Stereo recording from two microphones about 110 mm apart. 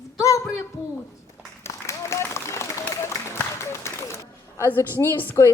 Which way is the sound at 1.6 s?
25° left (ahead or behind).